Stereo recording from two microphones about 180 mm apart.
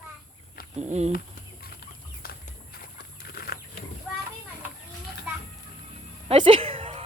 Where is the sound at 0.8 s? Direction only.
40° right (ahead or behind).